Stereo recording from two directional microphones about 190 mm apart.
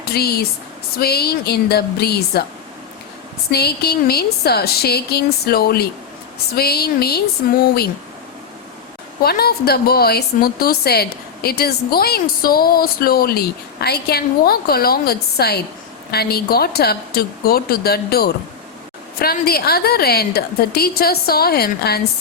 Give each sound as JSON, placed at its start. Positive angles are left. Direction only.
{"t": 0.0, "sound": "speech", "side_deg": 55}
{"t": 3.5, "sound": "speech", "side_deg": 55}
{"t": 9.2, "sound": "speech", "side_deg": 55}